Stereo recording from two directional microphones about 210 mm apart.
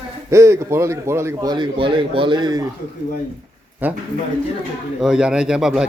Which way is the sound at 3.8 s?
10° right (ahead or behind).